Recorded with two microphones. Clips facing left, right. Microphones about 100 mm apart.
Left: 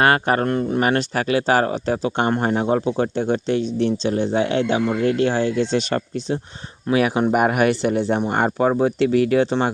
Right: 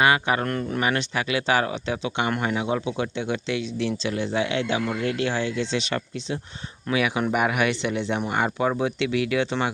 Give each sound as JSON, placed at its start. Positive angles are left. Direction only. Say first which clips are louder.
{"t": 0.0, "sound": "speech", "louder": "left 4 dB", "side_deg": 45}
{"t": 0.4, "sound": "speech", "louder": "left 6 dB", "side_deg": 25}
{"t": 0.8, "sound": "speech", "louder": "left 5 dB", "side_deg": 40}